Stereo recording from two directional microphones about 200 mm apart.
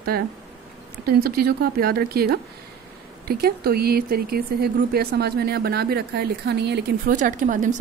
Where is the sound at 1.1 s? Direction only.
50° right (ahead or behind).